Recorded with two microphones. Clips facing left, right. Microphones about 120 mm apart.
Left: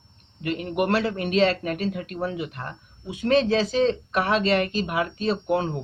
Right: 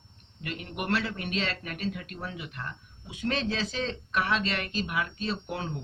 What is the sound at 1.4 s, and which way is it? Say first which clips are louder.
Speech: left 14 dB; 50° left (ahead or behind).